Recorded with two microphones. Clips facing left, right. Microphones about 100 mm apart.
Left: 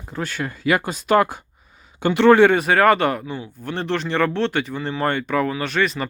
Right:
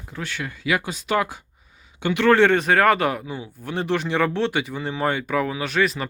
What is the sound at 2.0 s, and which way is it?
Speech, 40° left (ahead or behind).